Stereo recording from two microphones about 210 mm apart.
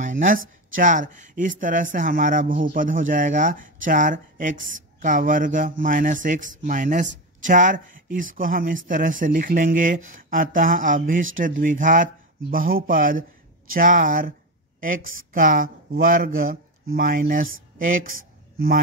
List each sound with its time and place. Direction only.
0.0 s a sound: 35° right (ahead or behind)
0.7 s speech: 35° right (ahead or behind)
15.3 s speech: 40° right (ahead or behind)